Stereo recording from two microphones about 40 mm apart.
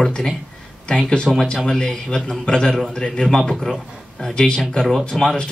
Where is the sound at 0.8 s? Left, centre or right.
Left.